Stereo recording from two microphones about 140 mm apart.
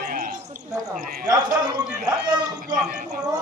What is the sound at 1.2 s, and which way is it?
Speech, 30° right (ahead or behind).